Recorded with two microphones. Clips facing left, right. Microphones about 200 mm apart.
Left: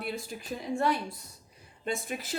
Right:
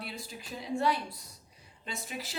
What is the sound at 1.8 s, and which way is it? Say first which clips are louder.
Speech: left 7 dB; 50° left (ahead or behind).